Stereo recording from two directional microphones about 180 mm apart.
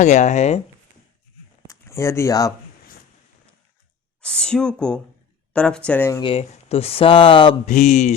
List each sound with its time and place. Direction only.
0.0 s speech: 40° left (ahead or behind)
1.6 s a sound: 15° left (ahead or behind)
4.2 s speech: 5° left (ahead or behind)
6.2 s speech: 35° left (ahead or behind)
7.7 s mantra: 45° left (ahead or behind)